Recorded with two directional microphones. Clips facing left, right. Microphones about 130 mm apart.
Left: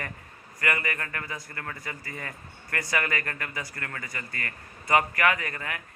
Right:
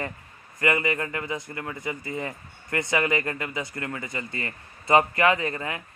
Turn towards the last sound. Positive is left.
turn(degrees=-25)  # may be behind; listen again after turning